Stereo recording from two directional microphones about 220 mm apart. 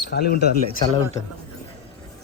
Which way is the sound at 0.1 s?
45° left (ahead or behind).